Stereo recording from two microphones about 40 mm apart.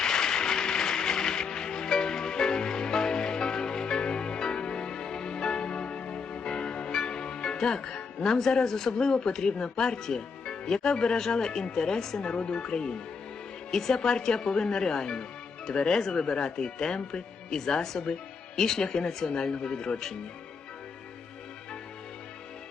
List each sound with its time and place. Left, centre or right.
0.0 s music: centre
7.9 s speech: centre